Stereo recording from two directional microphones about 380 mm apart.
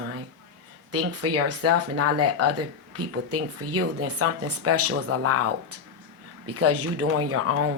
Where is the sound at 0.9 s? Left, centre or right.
Right.